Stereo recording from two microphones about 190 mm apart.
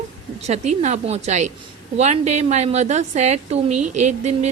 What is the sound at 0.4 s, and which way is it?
A woman's voice, 35° right (ahead or behind).